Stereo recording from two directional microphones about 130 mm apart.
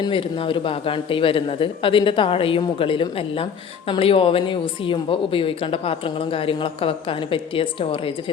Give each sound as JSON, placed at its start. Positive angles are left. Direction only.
{"t": 0.1, "sound": "speech", "side_deg": 45}